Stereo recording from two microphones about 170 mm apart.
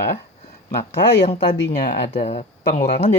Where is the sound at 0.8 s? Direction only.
40° left (ahead or behind).